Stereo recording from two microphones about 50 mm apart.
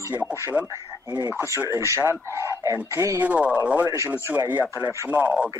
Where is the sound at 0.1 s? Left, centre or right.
Right.